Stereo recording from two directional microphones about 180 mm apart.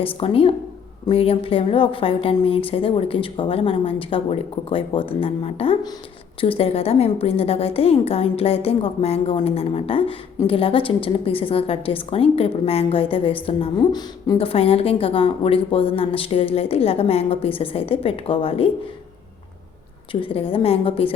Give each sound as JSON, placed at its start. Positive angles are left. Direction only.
{"t": 0.0, "sound": "a woman's voice", "side_deg": 30}
{"t": 20.2, "sound": "a woman's voice", "side_deg": 30}